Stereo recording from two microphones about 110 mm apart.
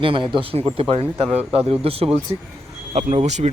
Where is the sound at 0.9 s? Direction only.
65° right (ahead or behind).